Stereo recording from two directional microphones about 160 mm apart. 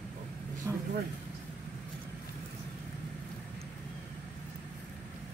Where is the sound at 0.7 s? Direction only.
15° right (ahead or behind).